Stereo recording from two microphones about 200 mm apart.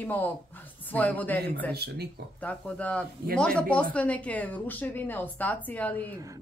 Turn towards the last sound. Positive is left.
turn(degrees=10)  # may be behind; listen again after turning